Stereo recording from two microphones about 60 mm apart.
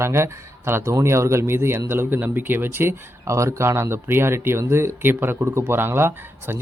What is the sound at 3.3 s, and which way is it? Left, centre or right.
Speech, right.